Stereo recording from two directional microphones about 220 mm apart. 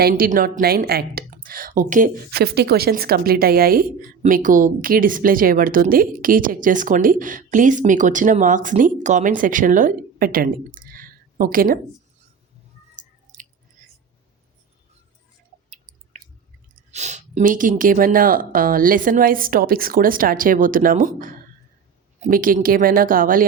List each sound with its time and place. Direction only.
0.0 s a woman's voice: 40° right (ahead or behind)
13.0 s a sound: 35° right (ahead or behind)
15.7 s chewing: 35° right (ahead or behind)
16.7 s a woman's voice: 30° right (ahead or behind)